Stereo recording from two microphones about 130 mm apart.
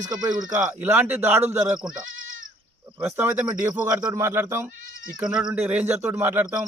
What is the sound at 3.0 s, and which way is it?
A man's voice, 20° right (ahead or behind).